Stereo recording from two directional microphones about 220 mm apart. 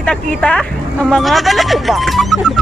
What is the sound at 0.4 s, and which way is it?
Speech, 5° left (ahead or behind).